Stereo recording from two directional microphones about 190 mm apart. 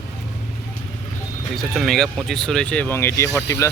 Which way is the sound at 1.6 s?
Centre (ahead or behind).